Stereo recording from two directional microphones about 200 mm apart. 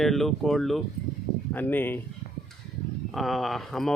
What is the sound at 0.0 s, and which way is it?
Speech, centre (ahead or behind).